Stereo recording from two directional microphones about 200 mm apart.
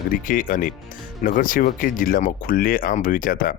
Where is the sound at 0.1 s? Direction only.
45° left (ahead or behind).